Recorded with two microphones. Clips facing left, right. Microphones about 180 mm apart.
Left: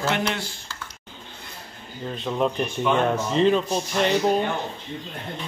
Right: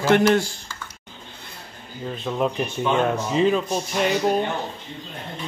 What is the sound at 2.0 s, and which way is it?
Music, 5° right (ahead or behind).